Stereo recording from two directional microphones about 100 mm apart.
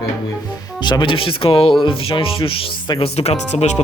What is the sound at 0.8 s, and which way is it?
Speech, 50° left (ahead or behind).